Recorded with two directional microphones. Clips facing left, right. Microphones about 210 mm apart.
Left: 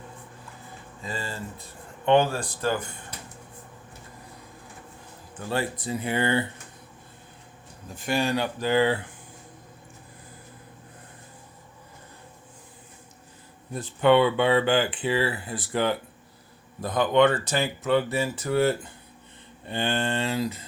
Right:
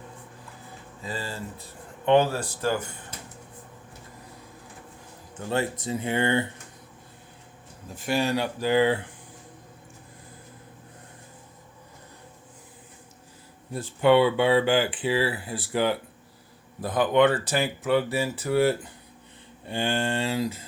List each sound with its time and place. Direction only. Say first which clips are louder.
1.0 s speech: even; 15° right (ahead or behind)
5.4 s speech: right 1 dB; 20° right (ahead or behind)
7.9 s speech: even; 5° right (ahead or behind)
13.7 s speech: even; 10° right (ahead or behind)